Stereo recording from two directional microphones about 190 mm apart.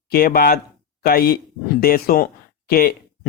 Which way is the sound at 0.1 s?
50° left (ahead or behind).